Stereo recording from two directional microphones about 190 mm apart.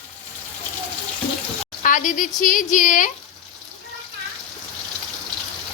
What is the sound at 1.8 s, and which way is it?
A woman's voice, 45° left (ahead or behind).